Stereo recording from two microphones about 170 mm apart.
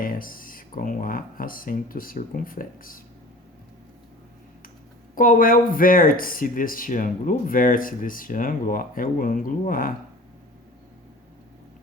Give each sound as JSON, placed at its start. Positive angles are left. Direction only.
{"t": 0.0, "sound": "speech", "side_deg": 55}
{"t": 5.1, "sound": "speech", "side_deg": 55}